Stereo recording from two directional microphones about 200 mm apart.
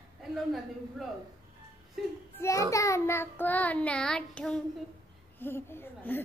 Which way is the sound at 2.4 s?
15° left (ahead or behind).